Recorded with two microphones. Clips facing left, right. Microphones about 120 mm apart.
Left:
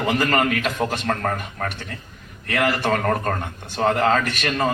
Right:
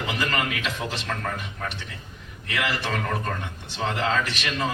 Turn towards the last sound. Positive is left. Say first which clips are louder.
# left 4 dB
turn(degrees=50)  # may be behind; listen again after turning